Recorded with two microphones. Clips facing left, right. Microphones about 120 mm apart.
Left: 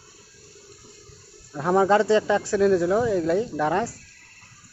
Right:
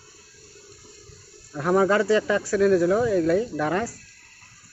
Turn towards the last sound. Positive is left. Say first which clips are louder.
# left 1 dB
turn(degrees=20)  # may be behind; listen again after turning